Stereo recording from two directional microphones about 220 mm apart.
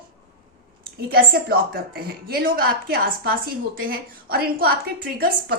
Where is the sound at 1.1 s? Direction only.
45° right (ahead or behind).